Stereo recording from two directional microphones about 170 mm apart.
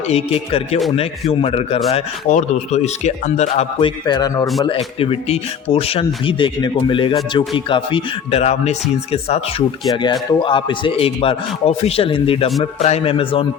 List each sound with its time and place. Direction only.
0.1 s speech: 35° left (ahead or behind)